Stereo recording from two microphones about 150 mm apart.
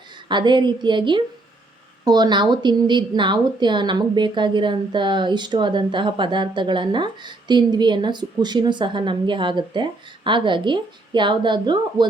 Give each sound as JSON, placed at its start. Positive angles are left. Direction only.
{"t": 0.3, "sound": "a woman's voice", "side_deg": -30}